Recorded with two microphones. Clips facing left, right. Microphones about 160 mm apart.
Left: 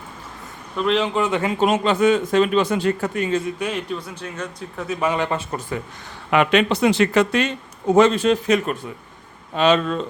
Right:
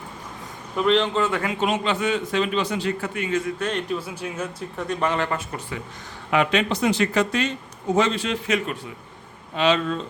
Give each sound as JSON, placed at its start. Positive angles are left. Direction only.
{"t": 0.8, "sound": "a man's voice", "side_deg": 5}
{"t": 1.5, "sound": "a man's voice", "side_deg": 40}
{"t": 3.6, "sound": "speech", "side_deg": 5}
{"t": 6.3, "sound": "speech", "side_deg": 65}
{"t": 7.9, "sound": "a man's voice", "side_deg": 45}